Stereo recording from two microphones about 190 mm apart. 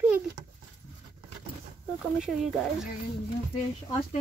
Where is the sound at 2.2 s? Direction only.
Centre (ahead or behind).